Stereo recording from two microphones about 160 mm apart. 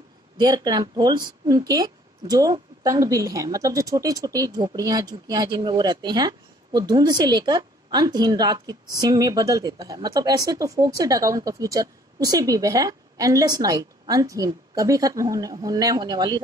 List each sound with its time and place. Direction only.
0.4 s a woman's voice: 25° right (ahead or behind)